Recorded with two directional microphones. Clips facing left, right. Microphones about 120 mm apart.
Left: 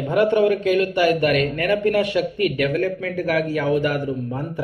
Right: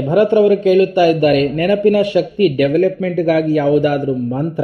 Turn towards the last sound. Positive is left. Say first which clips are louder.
# right 7 dB
turn(degrees=-20)  # may be behind; listen again after turning